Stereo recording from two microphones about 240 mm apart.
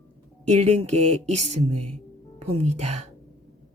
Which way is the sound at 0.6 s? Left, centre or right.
Right.